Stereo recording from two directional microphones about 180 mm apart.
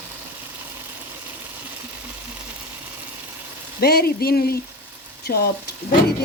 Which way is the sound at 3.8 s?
60° left (ahead or behind).